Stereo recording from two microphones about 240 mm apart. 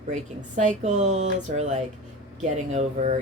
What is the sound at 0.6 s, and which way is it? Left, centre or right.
A woman's voice, right.